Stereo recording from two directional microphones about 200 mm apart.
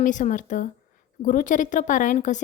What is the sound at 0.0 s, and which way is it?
A woman's voice, 40° left (ahead or behind).